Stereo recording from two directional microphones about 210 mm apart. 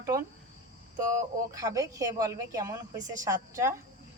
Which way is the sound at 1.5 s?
15° right (ahead or behind).